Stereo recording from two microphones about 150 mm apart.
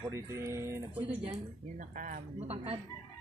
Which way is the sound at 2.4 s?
45° right (ahead or behind).